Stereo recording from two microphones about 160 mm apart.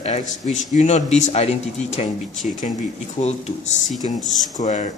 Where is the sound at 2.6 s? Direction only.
45° left (ahead or behind).